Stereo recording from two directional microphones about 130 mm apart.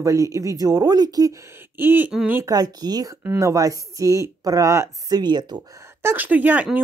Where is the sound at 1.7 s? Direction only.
15° right (ahead or behind).